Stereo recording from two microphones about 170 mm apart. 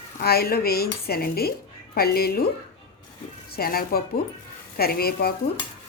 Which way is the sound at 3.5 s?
60° left (ahead or behind).